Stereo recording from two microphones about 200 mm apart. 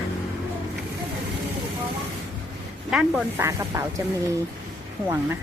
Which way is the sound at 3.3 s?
15° right (ahead or behind).